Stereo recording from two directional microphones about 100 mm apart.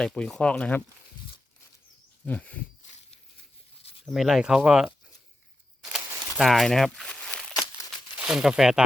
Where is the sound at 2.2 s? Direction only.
15° left (ahead or behind).